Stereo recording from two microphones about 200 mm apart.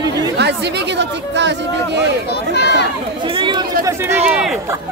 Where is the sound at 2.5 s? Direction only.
55° left (ahead or behind).